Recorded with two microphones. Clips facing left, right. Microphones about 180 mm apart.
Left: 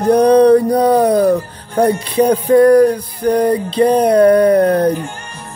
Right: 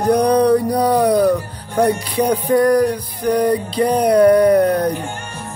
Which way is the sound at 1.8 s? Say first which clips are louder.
Left 3 dB; 50° left (ahead or behind).